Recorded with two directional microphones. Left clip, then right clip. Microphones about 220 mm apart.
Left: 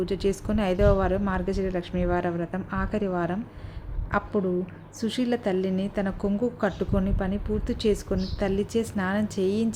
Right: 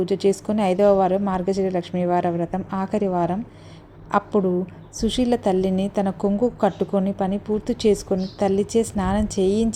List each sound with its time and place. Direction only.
0.0 s a woman's voice: 15° right (ahead or behind)